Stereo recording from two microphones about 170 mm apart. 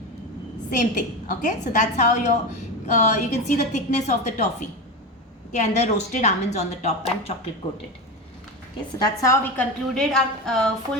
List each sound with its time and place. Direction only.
0.7 s a woman's voice: 50° left (ahead or behind)
5.5 s a woman's voice: 40° left (ahead or behind)
9.0 s a woman's voice: 20° left (ahead or behind)
9.6 s a woman's voice: 5° left (ahead or behind)